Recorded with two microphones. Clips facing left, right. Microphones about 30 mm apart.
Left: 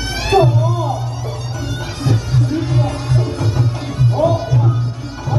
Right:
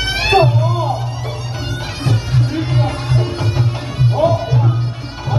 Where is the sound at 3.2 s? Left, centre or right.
Right.